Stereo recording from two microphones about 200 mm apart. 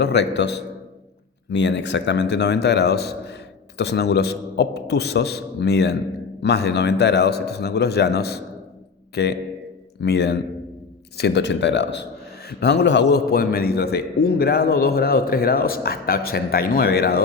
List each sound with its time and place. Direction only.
0.0 s a man's voice: 60° left (ahead or behind)
1.5 s a man's voice: 60° left (ahead or behind)